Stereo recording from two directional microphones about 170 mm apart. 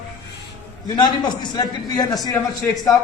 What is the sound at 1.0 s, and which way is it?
A man's voice, 25° left (ahead or behind).